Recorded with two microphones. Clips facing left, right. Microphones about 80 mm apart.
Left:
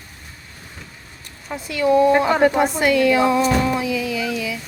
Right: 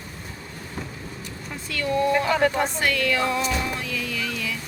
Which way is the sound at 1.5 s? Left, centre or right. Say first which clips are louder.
Left 9 dB; centre.